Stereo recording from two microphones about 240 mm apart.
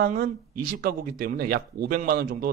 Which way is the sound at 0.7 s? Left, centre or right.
Right.